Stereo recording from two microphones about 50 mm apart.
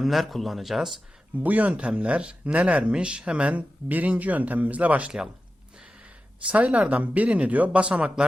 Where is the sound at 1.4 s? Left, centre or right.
Right.